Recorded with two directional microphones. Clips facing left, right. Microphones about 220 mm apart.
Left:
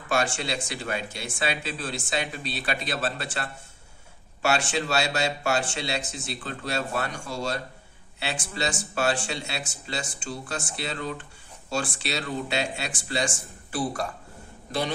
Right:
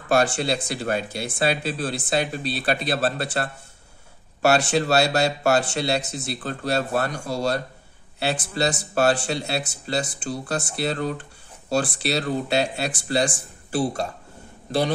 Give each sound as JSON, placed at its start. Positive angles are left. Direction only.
{"t": 0.1, "sound": "speech", "side_deg": -35}